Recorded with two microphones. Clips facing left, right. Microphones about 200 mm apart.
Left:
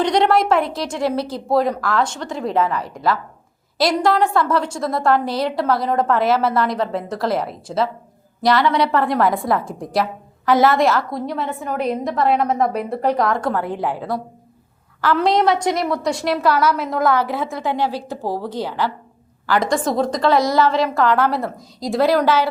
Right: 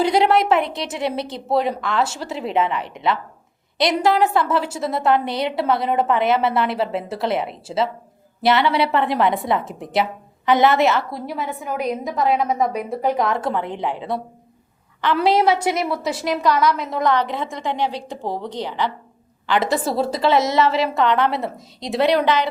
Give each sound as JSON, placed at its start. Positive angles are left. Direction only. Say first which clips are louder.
{"t": 0.0, "sound": "a woman's voice", "louder": "even", "side_deg": -5}
{"t": 3.8, "sound": "a woman's voice", "louder": "left 1 dB", "side_deg": 0}
{"t": 8.4, "sound": "a woman's voice", "louder": "left 1 dB", "side_deg": -25}
{"t": 8.9, "sound": "a woman's voice", "louder": "left 1 dB", "side_deg": 0}
{"t": 19.5, "sound": "a woman's voice", "louder": "left 1 dB", "side_deg": -5}